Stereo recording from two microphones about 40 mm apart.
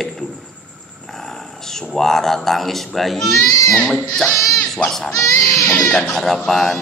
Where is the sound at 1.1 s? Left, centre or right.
Centre.